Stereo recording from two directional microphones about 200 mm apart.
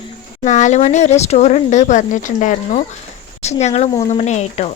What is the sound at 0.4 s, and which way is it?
Speech, 35° left (ahead or behind).